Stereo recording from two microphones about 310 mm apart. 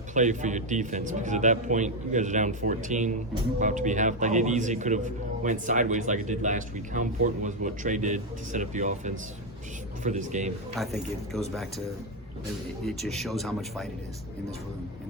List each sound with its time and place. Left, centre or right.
0.1 s a man's voice: right
10.8 s speech: centre
12.8 s speech: centre